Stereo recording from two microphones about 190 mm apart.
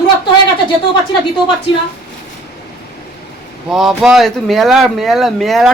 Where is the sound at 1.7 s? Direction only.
25° left (ahead or behind).